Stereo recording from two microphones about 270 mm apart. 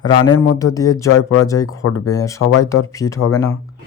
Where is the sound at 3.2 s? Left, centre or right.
Left.